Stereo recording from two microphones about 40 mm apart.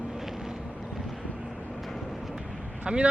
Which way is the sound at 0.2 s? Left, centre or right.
Centre.